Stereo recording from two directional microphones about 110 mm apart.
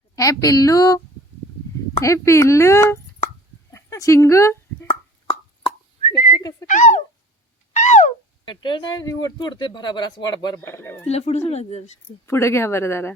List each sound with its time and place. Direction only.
0.2 s speech: 30° left (ahead or behind)
3.7 s a sound: 25° left (ahead or behind)
5.3 s whistling: 55° left (ahead or behind)
7.7 s a sound: 90° left
8.4 s speech: 45° left (ahead or behind)
10.6 s speech: 20° left (ahead or behind)
11.0 s speech: 70° left (ahead or behind)
12.2 s speech: 25° left (ahead or behind)